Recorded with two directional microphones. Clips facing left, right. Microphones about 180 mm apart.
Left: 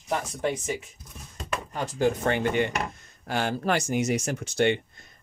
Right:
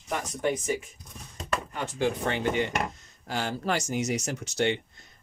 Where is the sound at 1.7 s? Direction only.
40° left (ahead or behind).